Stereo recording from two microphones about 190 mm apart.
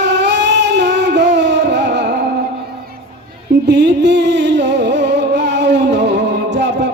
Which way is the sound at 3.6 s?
65° right (ahead or behind).